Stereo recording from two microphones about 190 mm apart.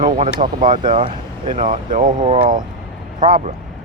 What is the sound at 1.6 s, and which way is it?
Speech, 45° right (ahead or behind).